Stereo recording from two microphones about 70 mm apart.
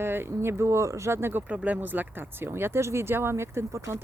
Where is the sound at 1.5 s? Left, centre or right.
Right.